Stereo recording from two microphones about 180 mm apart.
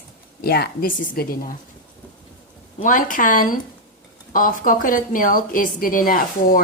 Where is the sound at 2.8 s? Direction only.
50° left (ahead or behind).